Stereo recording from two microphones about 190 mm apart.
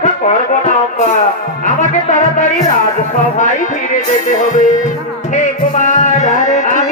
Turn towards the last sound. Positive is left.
turn(degrees=40)  # may be behind; listen again after turning